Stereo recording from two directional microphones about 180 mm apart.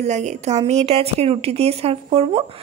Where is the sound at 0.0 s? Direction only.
40° right (ahead or behind).